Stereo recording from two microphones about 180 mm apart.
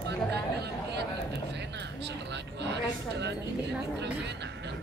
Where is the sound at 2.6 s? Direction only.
75° right (ahead or behind).